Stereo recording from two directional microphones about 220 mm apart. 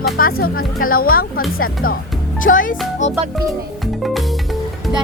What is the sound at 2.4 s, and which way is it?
Speech, 40° left (ahead or behind).